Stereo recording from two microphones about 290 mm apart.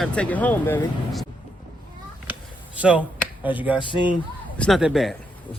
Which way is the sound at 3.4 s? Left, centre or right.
Centre.